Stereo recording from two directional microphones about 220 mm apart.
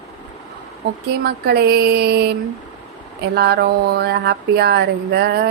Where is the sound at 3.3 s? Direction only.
45° right (ahead or behind).